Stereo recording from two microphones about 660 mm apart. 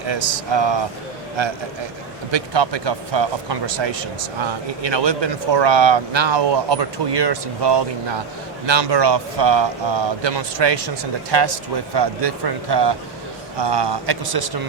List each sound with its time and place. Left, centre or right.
0.1 s a man's voice: right